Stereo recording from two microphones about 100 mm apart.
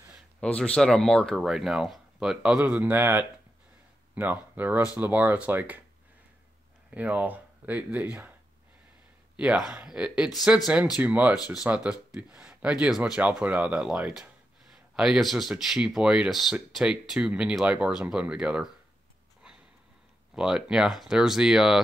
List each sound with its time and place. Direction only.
0.4 s speech: 10° left (ahead or behind); by 5.8 s 15° right (ahead or behind)
6.9 s speech: 15° right (ahead or behind)
9.4 s speech: 5° right (ahead or behind)
20.3 s speech: 5° right (ahead or behind)